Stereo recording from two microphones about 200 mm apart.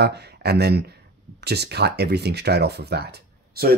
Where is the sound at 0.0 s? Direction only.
55° right (ahead or behind).